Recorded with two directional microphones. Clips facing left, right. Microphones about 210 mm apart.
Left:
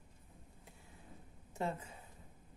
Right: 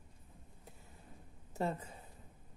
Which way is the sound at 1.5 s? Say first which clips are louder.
Right 2 dB; 40° right (ahead or behind).